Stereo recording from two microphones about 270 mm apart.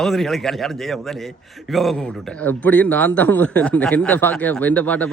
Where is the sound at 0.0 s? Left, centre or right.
Centre.